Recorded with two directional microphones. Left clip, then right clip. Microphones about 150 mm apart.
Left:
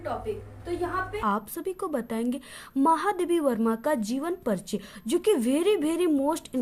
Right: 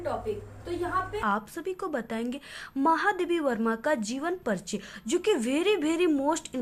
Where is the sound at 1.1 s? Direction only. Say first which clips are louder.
Left 1 dB; 30° left (ahead or behind).